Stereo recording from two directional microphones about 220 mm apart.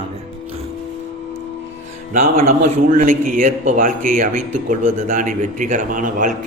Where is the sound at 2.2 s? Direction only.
30° right (ahead or behind).